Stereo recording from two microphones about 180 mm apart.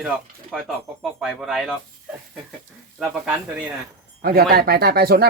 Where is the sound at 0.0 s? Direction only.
5° right (ahead or behind).